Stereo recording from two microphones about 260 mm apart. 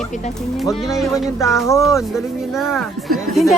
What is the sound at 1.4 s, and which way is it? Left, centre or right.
Speech, centre.